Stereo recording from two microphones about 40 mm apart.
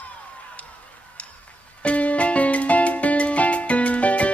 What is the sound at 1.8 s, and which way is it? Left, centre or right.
Music, left.